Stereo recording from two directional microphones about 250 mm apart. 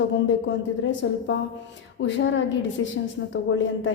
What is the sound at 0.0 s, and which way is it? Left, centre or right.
A woman's voice, left.